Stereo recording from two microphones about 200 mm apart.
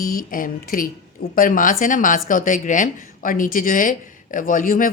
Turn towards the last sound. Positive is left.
turn(degrees=40)  # may be behind; listen again after turning